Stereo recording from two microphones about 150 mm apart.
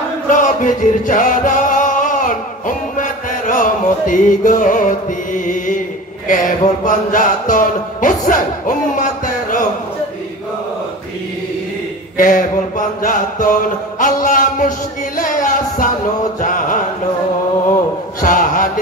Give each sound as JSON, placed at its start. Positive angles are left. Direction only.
{"t": 0.3, "sound": "music", "side_deg": 60}
{"t": 6.2, "sound": "mantra", "side_deg": 60}
{"t": 12.2, "sound": "mantra", "side_deg": 60}
{"t": 15.1, "sound": "music", "side_deg": 60}
{"t": 16.3, "sound": "chant", "side_deg": 60}
{"t": 18.2, "sound": "a sound", "side_deg": 65}